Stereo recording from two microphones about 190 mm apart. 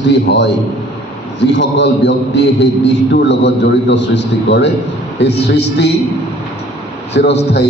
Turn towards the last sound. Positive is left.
turn(degrees=65)  # may be behind; listen again after turning